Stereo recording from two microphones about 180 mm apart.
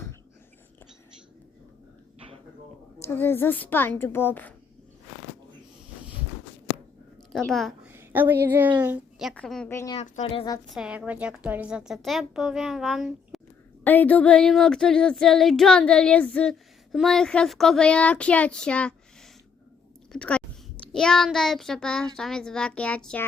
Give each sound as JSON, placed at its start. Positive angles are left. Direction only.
{"t": 3.0, "sound": "a woman's voice", "side_deg": 15}
{"t": 7.3, "sound": "speech", "side_deg": 0}
{"t": 7.9, "sound": "a woman's voice", "side_deg": -10}
{"t": 9.7, "sound": "a woman's voice", "side_deg": 20}
{"t": 10.7, "sound": "speech", "side_deg": -5}
{"t": 13.8, "sound": "speech", "side_deg": 10}
{"t": 20.1, "sound": "speech", "side_deg": 5}